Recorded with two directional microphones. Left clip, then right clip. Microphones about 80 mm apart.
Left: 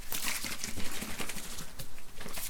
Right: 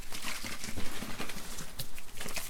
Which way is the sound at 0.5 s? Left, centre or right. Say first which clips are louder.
Left 1 dB; left.